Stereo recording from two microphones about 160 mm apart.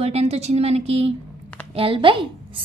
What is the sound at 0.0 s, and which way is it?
A woman's voice, 40° right (ahead or behind).